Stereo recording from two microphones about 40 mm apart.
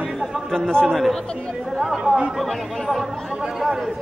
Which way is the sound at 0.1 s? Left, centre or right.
Centre.